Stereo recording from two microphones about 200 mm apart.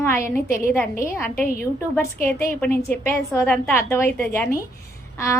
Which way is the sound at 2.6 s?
50° left (ahead or behind).